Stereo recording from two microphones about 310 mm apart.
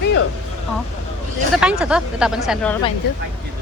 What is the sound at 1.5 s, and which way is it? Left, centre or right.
Speech, centre.